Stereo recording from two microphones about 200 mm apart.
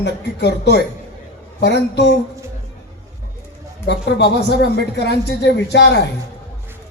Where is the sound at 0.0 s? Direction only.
60° left (ahead or behind).